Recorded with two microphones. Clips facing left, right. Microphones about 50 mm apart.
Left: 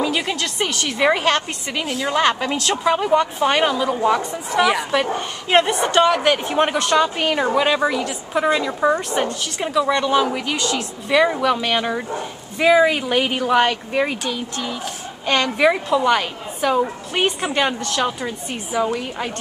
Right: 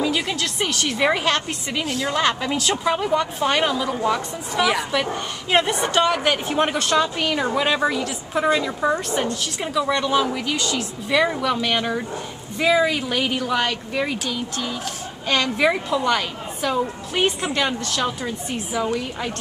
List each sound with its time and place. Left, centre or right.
0.0 s a woman's voice: centre
7.2 s speech: centre
7.5 s a woman's voice: centre; by 14.1 s left
14.1 s a woman's voice: centre